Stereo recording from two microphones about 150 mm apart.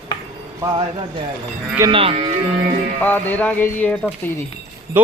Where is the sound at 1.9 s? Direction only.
35° right (ahead or behind).